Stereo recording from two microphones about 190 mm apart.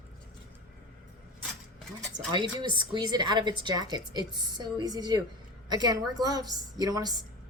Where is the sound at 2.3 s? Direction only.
25° right (ahead or behind).